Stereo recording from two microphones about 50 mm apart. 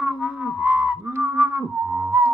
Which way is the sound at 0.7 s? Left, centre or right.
Right.